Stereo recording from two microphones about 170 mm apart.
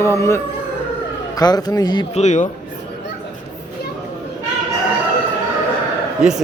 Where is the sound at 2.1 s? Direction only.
45° left (ahead or behind).